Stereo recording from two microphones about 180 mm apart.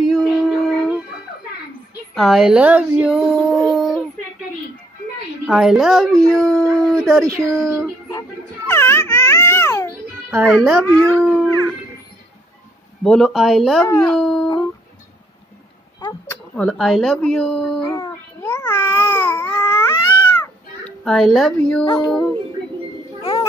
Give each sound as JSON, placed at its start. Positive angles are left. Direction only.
{"t": 0.1, "sound": "a sound", "side_deg": 0}
{"t": 2.1, "sound": "speech", "side_deg": 0}
{"t": 5.5, "sound": "speech", "side_deg": 0}
{"t": 8.1, "sound": "baby cry", "side_deg": 15}
{"t": 10.3, "sound": "speech", "side_deg": -5}
{"t": 13.0, "sound": "speech", "side_deg": 5}
{"t": 13.8, "sound": "dog", "side_deg": 10}
{"t": 16.3, "sound": "speech", "side_deg": 5}
{"t": 17.8, "sound": "babbling", "side_deg": 20}
{"t": 20.8, "sound": "a woman's voice", "side_deg": 0}
{"t": 21.8, "sound": "speech", "side_deg": 20}